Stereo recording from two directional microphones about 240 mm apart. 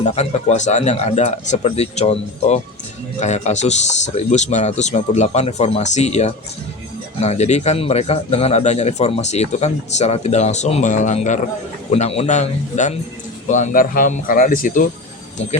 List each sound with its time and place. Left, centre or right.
0.0 s speech: left